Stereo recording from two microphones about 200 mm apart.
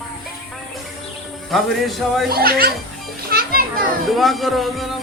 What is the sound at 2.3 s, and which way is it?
Speech, 50° right (ahead or behind).